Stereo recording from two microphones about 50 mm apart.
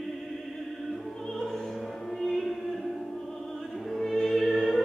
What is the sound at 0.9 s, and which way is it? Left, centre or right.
Music, centre.